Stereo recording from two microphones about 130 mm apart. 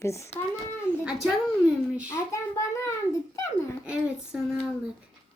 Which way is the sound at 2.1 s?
20° left (ahead or behind).